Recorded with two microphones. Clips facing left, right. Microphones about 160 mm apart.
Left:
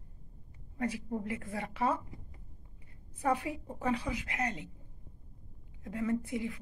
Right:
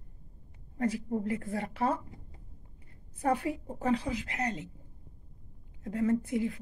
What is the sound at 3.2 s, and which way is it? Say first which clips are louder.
A woman's voice: right 2 dB; 45° right (ahead or behind).